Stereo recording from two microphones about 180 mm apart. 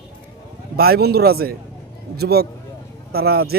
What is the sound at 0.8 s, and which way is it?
Speech, 60° right (ahead or behind).